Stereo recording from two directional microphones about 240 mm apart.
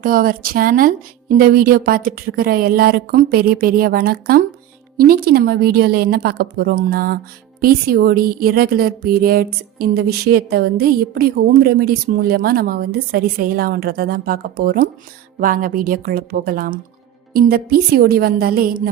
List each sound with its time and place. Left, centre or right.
0.0 s a woman's voice: right